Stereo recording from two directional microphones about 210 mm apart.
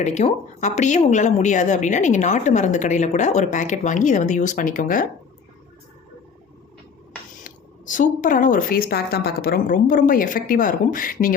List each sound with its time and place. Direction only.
0.0 s a woman's voice: 35° left (ahead or behind)
7.4 s a woman's voice: 40° left (ahead or behind)